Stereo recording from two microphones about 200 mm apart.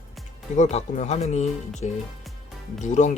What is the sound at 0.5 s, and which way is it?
Speech, 35° left (ahead or behind).